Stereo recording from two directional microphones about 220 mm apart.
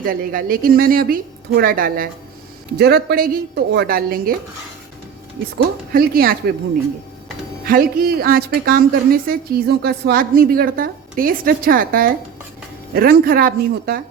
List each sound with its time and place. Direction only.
0.0 s a woman's voice: 40° right (ahead or behind)
5.9 s a woman's voice: 40° right (ahead or behind)
7.6 s a woman's voice: 40° right (ahead or behind)